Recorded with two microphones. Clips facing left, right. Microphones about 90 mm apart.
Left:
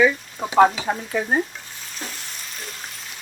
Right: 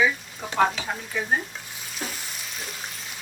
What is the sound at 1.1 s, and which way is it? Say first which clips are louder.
Stir: left 4 dB; 40° left (ahead or behind).